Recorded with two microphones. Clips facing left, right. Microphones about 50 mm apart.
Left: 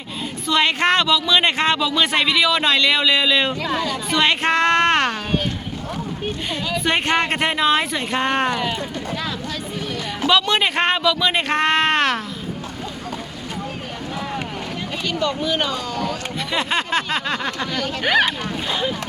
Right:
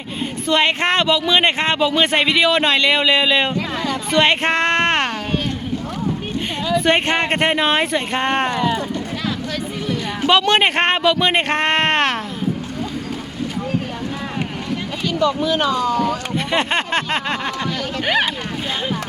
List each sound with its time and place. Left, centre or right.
0.4 s speech: right
3.8 s speech: right
6.8 s speech: right
10.4 s speech: right
16.0 s speech: right
17.6 s speech: centre